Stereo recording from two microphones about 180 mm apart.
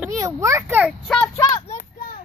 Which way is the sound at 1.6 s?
50° left (ahead or behind).